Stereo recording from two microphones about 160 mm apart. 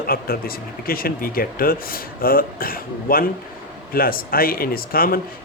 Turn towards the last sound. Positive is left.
turn(degrees=65)  # may be behind; listen again after turning